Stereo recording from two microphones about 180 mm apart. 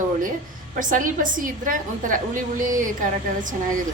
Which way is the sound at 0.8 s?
45° right (ahead or behind).